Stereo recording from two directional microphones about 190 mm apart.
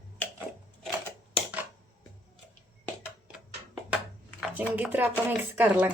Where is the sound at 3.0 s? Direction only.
5° right (ahead or behind).